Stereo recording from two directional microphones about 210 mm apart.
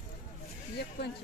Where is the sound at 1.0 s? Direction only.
55° left (ahead or behind).